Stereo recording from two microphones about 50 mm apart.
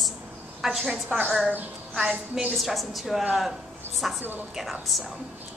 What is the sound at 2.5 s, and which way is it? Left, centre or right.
A woman's voice, centre.